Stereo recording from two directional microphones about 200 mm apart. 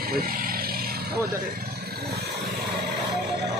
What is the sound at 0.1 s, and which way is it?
Vehicle, 45° right (ahead or behind).